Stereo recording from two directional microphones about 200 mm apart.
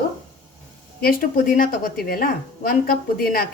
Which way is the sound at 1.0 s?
45° left (ahead or behind).